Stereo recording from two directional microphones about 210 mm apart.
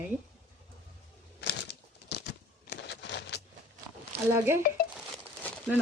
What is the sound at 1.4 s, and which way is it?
Crumpling, 50° left (ahead or behind).